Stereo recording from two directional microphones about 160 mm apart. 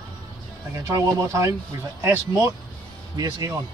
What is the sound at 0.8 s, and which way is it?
Speech, 20° right (ahead or behind).